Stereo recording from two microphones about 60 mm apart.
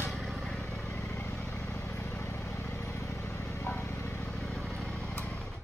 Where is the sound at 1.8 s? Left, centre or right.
Left.